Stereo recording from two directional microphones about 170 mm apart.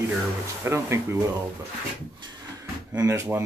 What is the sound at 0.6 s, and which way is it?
Speech, 15° right (ahead or behind).